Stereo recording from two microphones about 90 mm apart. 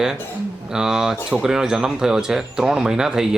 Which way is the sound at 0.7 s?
5° right (ahead or behind).